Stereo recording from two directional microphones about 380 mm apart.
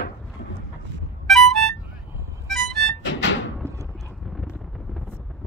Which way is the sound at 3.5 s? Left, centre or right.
Centre.